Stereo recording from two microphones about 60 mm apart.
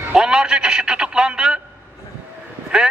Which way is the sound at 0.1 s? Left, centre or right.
Centre.